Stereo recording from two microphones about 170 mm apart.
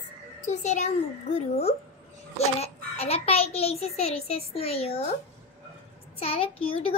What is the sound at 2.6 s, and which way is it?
A child's voice, 35° left (ahead or behind).